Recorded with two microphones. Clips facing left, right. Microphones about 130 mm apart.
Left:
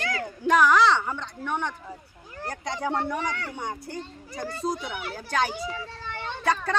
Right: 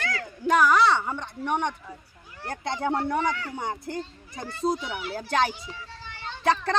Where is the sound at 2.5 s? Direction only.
25° right (ahead or behind).